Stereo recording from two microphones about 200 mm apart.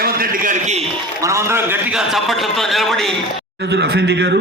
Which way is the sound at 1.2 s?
15° right (ahead or behind).